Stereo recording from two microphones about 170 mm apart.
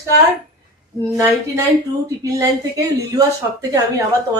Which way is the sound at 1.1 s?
20° right (ahead or behind).